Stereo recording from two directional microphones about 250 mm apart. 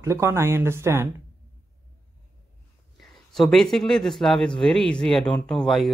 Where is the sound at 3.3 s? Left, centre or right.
Centre.